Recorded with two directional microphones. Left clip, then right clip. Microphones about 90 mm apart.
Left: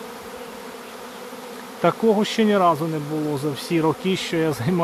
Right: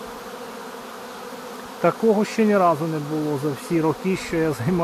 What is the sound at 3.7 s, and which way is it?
Speech, 20° left (ahead or behind).